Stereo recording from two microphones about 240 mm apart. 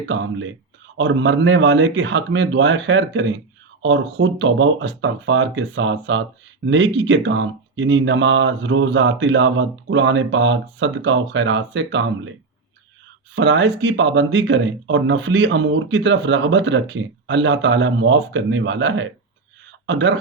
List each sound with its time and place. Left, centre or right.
0.1 s speech: right
13.3 s speech: right